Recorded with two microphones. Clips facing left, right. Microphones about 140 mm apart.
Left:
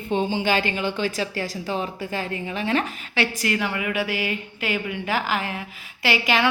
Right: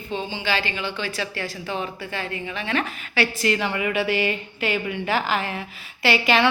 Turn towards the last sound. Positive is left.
turn(degrees=15)  # may be behind; listen again after turning